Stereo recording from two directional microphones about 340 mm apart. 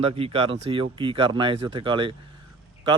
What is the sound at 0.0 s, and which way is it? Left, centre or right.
A man's voice, centre.